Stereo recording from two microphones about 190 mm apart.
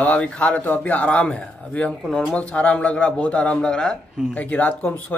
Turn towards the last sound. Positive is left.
turn(degrees=10)  # may be behind; listen again after turning